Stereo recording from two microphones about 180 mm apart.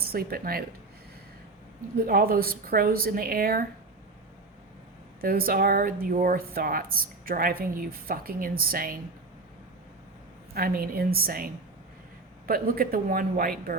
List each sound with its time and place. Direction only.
0.0 s speech: 55° right (ahead or behind)
2.0 s a woman's voice: 55° right (ahead or behind)
5.2 s speech: 55° right (ahead or behind)
10.5 s a woman's voice: 55° right (ahead or behind)